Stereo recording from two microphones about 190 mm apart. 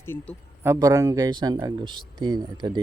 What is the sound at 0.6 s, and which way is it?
Speech, 15° right (ahead or behind).